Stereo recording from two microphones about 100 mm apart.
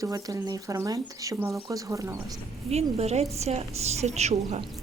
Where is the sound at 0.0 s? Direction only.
35° right (ahead or behind).